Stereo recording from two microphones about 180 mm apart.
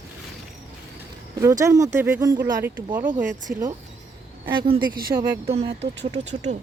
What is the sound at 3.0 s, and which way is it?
Speech, 45° right (ahead or behind).